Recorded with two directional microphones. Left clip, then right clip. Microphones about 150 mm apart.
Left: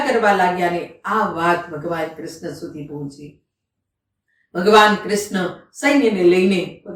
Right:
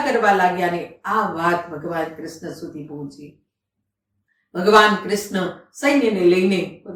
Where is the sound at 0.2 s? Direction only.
10° right (ahead or behind).